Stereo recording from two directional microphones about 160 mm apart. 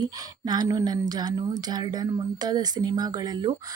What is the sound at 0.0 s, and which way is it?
Speech, 25° right (ahead or behind).